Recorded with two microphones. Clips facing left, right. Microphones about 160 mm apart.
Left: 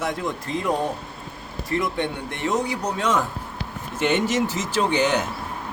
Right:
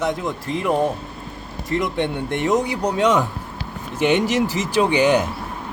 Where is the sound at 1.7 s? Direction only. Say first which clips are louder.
Right 3 dB; 20° right (ahead or behind).